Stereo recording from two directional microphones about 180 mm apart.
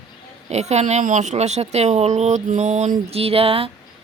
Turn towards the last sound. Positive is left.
turn(degrees=-30)  # may be behind; listen again after turning